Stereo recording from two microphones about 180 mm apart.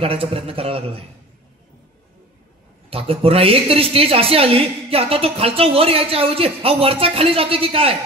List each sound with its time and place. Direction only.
0.0 s a woman's voice: 30° right (ahead or behind)
2.9 s a woman's voice: 30° right (ahead or behind)